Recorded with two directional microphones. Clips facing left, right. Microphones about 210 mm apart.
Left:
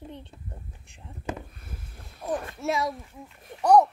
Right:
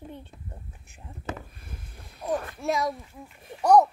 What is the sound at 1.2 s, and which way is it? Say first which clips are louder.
Speech: left 2 dB; 15° left (ahead or behind).